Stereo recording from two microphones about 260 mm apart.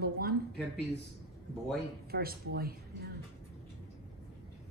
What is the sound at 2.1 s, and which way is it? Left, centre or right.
Speech, right.